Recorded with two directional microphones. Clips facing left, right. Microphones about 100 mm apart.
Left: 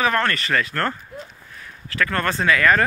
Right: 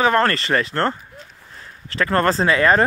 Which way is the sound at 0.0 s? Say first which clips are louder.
Right 4 dB; 30° right (ahead or behind).